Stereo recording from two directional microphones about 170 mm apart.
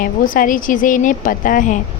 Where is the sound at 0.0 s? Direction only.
55° left (ahead or behind).